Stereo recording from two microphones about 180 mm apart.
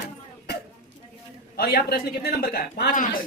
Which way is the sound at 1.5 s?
60° left (ahead or behind).